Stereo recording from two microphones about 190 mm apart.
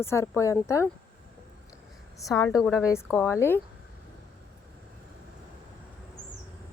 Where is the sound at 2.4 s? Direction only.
Centre (ahead or behind).